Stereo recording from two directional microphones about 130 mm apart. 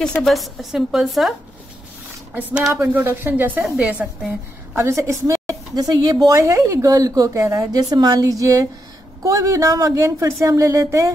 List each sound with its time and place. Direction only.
0.2 s a woman's voice: centre (ahead or behind)
2.3 s speech: 10° right (ahead or behind)
4.7 s a woman's voice: 20° right (ahead or behind)